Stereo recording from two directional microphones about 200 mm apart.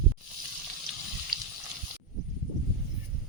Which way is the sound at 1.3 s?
20° right (ahead or behind).